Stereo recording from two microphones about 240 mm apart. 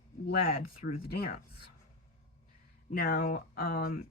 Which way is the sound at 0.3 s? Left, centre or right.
Left.